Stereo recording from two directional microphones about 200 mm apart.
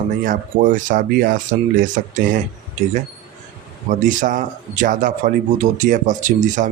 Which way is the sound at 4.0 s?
40° right (ahead or behind).